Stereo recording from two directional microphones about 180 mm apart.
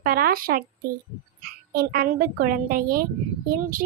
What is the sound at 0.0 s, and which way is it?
A child's voice, 55° right (ahead or behind).